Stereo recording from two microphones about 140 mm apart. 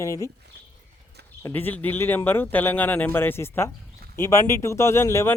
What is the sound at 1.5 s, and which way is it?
Speech, 15° left (ahead or behind).